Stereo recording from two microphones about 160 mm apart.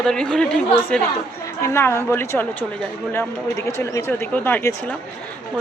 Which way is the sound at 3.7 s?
15° left (ahead or behind).